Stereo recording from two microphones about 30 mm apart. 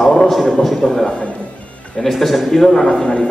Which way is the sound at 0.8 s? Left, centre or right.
Left.